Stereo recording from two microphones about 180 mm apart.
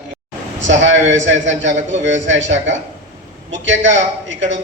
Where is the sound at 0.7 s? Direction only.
90° right.